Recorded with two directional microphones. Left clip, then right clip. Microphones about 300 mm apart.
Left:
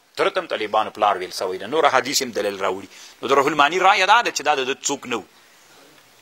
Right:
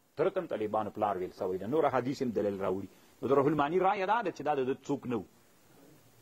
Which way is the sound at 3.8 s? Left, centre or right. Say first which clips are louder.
Left 16 dB; centre.